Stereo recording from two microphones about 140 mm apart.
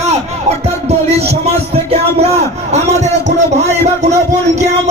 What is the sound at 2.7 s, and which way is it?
Speech, 55° right (ahead or behind).